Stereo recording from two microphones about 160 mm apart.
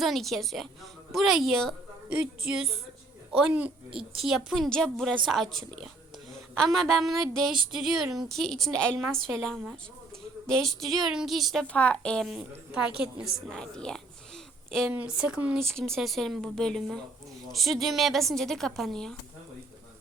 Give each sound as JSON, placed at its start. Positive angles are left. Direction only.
{"t": 0.0, "sound": "a woman's voice", "side_deg": 0}
{"t": 3.9, "sound": "speech", "side_deg": -35}
{"t": 4.3, "sound": "a woman's voice", "side_deg": 0}
{"t": 14.8, "sound": "speech", "side_deg": -5}
{"t": 15.7, "sound": "a woman's voice", "side_deg": 0}